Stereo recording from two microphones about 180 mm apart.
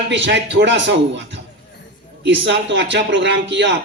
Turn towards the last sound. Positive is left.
turn(degrees=-75)  # may be behind; listen again after turning